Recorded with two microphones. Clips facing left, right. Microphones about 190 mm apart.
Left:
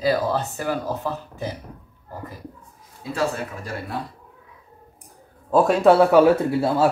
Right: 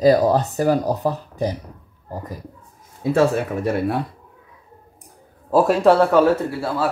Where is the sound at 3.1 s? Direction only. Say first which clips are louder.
Right 7 dB; 65° right (ahead or behind).